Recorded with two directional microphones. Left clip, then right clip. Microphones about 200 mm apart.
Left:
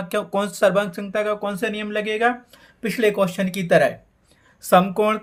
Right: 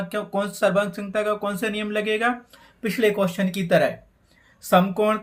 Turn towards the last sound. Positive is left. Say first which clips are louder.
# left 2 dB
turn(degrees=25)  # may be behind; listen again after turning